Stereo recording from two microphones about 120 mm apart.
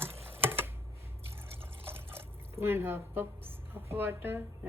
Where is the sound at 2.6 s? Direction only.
20° right (ahead or behind).